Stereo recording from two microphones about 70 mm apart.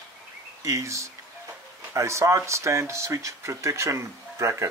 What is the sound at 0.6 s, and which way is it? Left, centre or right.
Speech, right.